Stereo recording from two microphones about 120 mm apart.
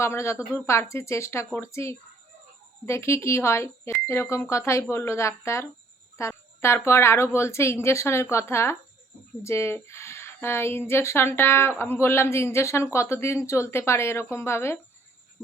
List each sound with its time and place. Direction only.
0.0 s a man's voice: 20° left (ahead or behind)